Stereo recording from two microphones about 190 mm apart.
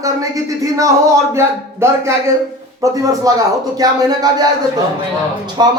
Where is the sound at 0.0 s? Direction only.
15° right (ahead or behind).